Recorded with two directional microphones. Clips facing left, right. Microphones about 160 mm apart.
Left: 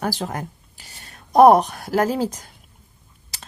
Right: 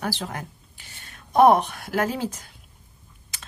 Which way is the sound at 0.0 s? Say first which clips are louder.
Left 4 dB; 45° left (ahead or behind).